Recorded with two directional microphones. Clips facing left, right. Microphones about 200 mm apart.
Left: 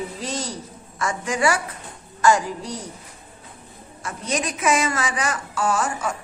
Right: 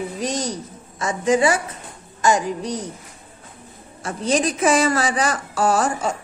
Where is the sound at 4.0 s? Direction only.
30° right (ahead or behind).